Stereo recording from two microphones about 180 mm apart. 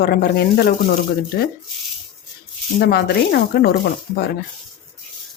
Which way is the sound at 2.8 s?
60° left (ahead or behind).